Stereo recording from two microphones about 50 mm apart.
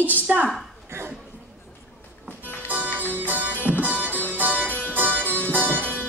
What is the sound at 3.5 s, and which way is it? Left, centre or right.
Music, left.